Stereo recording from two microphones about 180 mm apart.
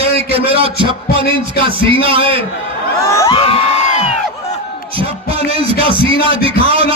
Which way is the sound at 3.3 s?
30° left (ahead or behind).